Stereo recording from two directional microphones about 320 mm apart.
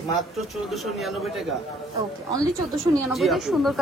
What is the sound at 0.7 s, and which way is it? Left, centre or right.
Speech, centre.